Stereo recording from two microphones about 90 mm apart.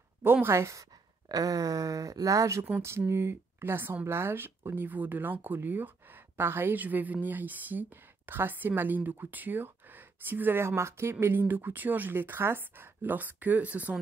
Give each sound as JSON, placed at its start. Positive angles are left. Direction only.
{"t": 0.2, "sound": "speech", "side_deg": -25}